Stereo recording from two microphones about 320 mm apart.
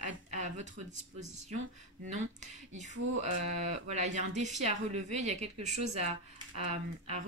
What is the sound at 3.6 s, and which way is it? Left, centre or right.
Speech, right.